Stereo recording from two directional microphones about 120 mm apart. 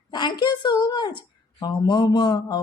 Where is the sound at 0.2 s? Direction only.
40° left (ahead or behind).